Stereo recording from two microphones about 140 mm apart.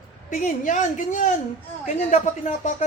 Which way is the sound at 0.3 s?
70° left (ahead or behind).